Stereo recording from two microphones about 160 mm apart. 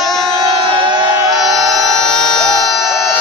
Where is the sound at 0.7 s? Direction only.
30° right (ahead or behind).